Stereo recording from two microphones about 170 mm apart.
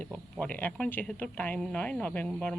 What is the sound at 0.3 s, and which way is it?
A woman's voice, 10° left (ahead or behind).